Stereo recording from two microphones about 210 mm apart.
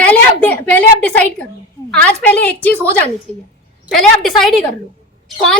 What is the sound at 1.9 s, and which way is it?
A woman's voice, 5° left (ahead or behind).